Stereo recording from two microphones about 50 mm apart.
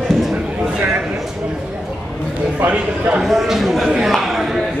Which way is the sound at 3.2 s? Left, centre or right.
Centre.